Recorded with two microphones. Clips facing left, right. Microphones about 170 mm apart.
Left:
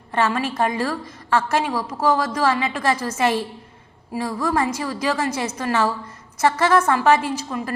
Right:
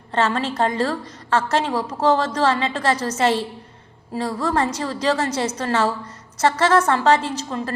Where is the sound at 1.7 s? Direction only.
25° right (ahead or behind).